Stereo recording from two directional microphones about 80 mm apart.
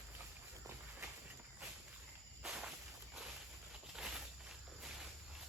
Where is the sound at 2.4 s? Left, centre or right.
Centre.